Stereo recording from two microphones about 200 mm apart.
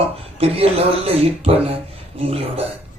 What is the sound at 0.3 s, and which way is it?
Speech, 30° right (ahead or behind).